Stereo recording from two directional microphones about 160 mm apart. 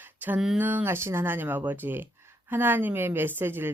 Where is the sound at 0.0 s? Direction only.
10° right (ahead or behind).